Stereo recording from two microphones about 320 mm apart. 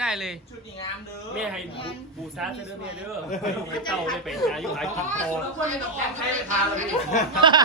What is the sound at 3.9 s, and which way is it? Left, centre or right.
Speech, centre.